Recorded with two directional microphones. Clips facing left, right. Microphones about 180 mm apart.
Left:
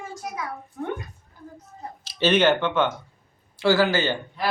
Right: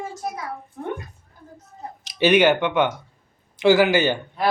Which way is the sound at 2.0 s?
15° right (ahead or behind).